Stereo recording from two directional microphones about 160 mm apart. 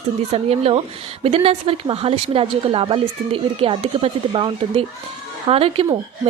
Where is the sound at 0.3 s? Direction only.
40° right (ahead or behind).